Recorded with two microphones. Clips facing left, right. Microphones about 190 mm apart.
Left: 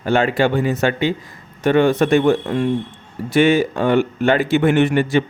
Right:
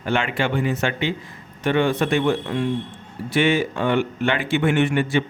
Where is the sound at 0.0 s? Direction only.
40° left (ahead or behind).